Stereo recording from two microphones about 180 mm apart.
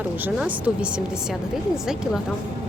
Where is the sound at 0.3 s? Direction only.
5° right (ahead or behind).